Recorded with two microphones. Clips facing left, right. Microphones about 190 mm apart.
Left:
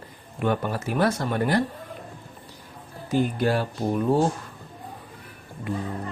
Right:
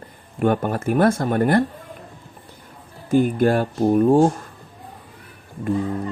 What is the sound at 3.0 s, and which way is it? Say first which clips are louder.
Speech: right 6 dB; 50° right (ahead or behind).